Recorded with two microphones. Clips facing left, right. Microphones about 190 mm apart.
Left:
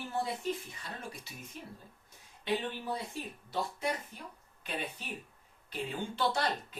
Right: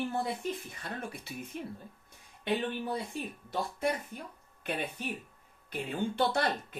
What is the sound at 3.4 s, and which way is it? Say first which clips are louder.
Speech: right 2 dB; 50° right (ahead or behind).